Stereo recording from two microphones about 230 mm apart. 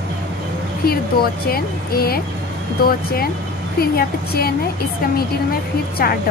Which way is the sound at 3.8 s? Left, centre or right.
Left.